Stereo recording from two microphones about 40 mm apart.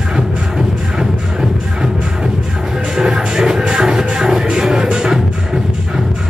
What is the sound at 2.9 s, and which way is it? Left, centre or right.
Music, centre.